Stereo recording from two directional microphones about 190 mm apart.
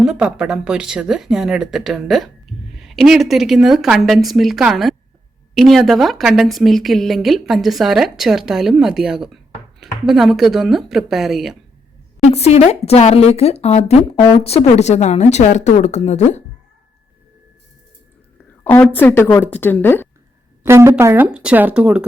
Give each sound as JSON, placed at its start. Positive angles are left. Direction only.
{"t": 0.0, "sound": "speech", "side_deg": -5}
{"t": 12.2, "sound": "speech", "side_deg": 35}
{"t": 18.6, "sound": "a woman's voice", "side_deg": 10}
{"t": 20.7, "sound": "speech", "side_deg": -15}